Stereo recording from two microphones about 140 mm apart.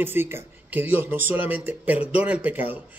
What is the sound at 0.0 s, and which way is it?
Speech, 15° right (ahead or behind).